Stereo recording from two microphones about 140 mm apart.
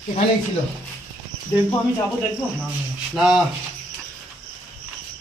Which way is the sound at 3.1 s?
5° right (ahead or behind).